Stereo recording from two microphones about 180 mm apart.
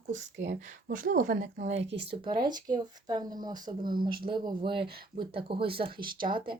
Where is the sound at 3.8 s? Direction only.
55° right (ahead or behind).